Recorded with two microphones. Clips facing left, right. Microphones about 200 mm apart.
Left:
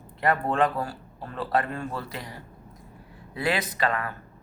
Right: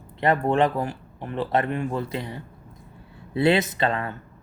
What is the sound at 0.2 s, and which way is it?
A man's voice, 20° right (ahead or behind).